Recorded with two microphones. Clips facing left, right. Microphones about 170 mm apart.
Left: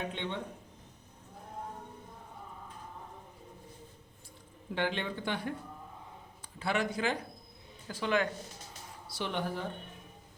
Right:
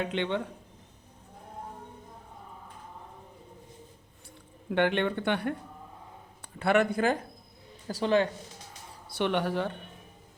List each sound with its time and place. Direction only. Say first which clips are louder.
0.0 s speech: right 7 dB; 75° right (ahead or behind)
4.7 s speech: right 8 dB; 65° right (ahead or behind)
7.9 s speech: right 6 dB; 35° right (ahead or behind)
9.1 s speech: right 7 dB; 70° right (ahead or behind)